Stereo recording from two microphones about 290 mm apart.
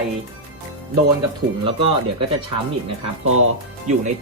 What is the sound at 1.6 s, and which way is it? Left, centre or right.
Speech, centre.